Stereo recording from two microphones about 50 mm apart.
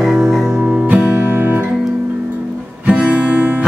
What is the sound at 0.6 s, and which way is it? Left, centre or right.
Music, right.